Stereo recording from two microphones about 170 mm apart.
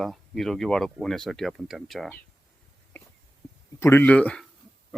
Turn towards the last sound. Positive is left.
turn(degrees=5)  # may be behind; listen again after turning